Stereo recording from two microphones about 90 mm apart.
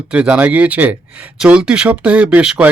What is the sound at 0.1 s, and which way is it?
Speech, 15° right (ahead or behind).